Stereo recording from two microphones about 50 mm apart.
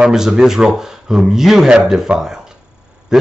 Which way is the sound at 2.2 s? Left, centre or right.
Centre.